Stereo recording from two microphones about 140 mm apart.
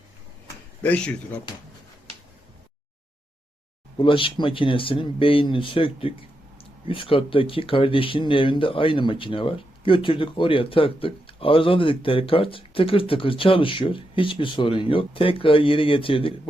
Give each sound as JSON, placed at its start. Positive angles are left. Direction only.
{"t": 0.8, "sound": "speech", "side_deg": 10}
{"t": 3.9, "sound": "speech", "side_deg": 35}